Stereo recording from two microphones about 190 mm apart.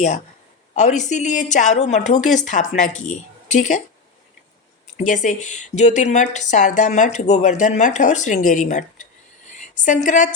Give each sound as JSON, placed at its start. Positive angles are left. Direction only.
{"t": 0.8, "sound": "a woman's voice", "side_deg": 40}
{"t": 4.9, "sound": "a woman's voice", "side_deg": 40}